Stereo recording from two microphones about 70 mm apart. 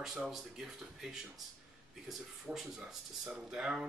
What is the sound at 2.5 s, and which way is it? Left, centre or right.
A man's voice, centre.